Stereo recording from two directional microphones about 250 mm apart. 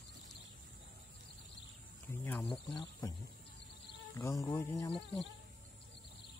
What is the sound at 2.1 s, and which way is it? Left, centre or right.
Cricket, centre.